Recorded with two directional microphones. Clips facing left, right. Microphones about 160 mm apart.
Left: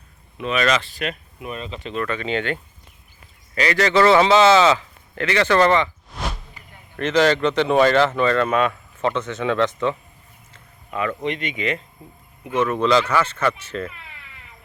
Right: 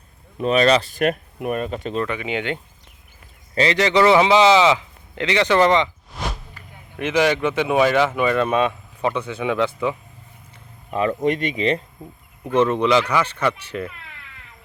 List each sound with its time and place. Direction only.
0.3 s speech: 40° right (ahead or behind)
2.0 s speech: 15° right (ahead or behind)
6.9 s speech: 10° right (ahead or behind)
10.9 s speech: 35° right (ahead or behind)
12.8 s speech: 15° right (ahead or behind)